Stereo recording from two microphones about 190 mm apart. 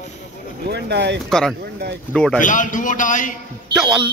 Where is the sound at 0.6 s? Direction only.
60° right (ahead or behind).